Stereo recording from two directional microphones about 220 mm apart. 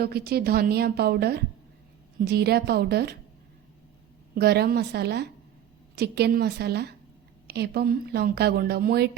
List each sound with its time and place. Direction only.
0.0 s speech: 45° right (ahead or behind)
4.4 s speech: 45° right (ahead or behind)